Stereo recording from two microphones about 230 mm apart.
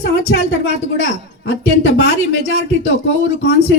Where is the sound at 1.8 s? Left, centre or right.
Left.